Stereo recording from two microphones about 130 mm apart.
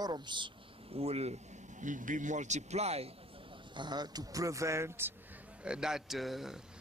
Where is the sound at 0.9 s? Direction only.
50° right (ahead or behind).